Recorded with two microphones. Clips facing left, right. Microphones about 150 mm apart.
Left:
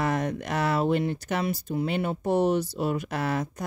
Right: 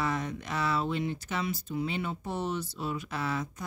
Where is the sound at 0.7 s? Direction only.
55° left (ahead or behind).